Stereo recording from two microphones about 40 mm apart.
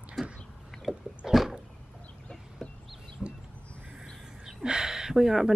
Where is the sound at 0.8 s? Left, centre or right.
Centre.